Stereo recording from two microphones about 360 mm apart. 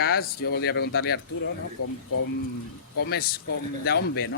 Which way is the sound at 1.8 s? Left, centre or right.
Left.